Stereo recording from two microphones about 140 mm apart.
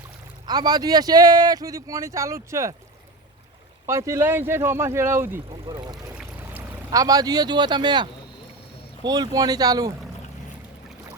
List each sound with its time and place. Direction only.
0.4 s speech: 30° right (ahead or behind)
3.8 s speech: 20° right (ahead or behind)
5.6 s speech: 30° right (ahead or behind)
9.0 s speech: 30° right (ahead or behind)